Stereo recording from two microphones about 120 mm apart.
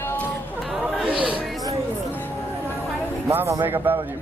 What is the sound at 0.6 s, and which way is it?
Chatter, 5° right (ahead or behind).